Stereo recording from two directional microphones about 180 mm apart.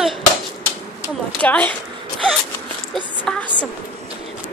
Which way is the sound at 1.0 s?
10° left (ahead or behind).